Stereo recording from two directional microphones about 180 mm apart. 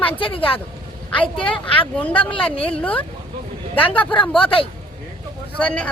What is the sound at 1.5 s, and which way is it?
Speech, 30° left (ahead or behind).